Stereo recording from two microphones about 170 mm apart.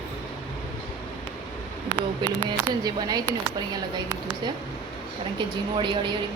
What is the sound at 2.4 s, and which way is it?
Speech, 25° right (ahead or behind).